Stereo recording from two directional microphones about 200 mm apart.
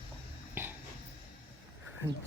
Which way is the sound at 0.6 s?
10° right (ahead or behind).